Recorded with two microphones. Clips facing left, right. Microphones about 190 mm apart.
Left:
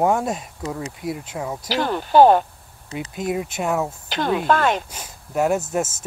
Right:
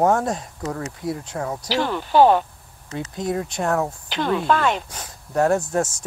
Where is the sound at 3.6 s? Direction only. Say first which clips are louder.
Right 1 dB; 5° left (ahead or behind).